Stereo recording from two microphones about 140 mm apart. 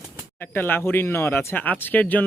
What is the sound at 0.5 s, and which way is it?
Speech, 15° left (ahead or behind).